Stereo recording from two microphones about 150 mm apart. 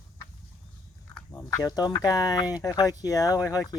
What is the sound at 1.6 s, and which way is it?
Speech, 25° left (ahead or behind).